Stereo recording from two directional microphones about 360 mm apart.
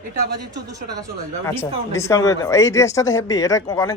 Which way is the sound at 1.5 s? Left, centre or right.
Centre.